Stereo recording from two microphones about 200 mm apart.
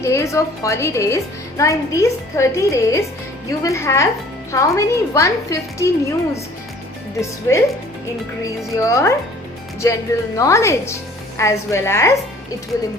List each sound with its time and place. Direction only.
0.0 s a woman's voice: 15° left (ahead or behind)
7.2 s a woman's voice: 15° left (ahead or behind)